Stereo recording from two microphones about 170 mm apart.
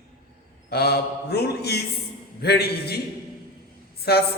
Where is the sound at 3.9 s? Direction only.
70° left (ahead or behind).